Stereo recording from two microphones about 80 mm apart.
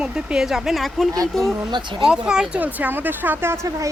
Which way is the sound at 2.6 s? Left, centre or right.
Right.